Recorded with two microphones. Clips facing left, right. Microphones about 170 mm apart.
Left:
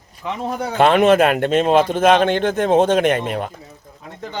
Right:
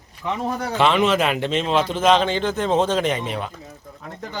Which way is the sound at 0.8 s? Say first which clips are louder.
Left 6 dB; 55° left (ahead or behind).